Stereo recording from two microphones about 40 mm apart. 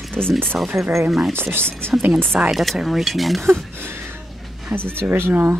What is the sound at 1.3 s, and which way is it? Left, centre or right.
Speech, right.